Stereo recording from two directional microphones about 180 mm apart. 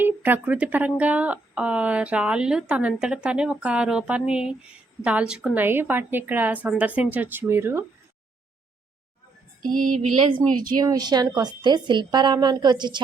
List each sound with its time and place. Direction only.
0.0 s speech: 10° right (ahead or behind)
10.0 s a woman's voice: 30° right (ahead or behind)